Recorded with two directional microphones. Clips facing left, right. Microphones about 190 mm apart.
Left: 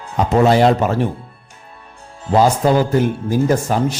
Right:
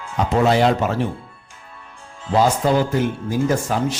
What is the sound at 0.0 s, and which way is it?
Speech, 40° left (ahead or behind).